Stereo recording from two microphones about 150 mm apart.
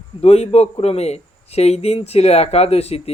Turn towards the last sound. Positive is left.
turn(degrees=45)  # may be behind; listen again after turning